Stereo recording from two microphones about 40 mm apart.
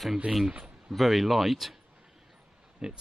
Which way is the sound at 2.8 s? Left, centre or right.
Centre.